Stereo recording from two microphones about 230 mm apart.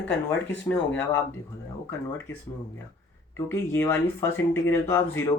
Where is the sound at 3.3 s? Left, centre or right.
Centre.